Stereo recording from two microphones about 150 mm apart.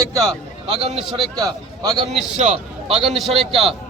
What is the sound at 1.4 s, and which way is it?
Speech, 25° right (ahead or behind).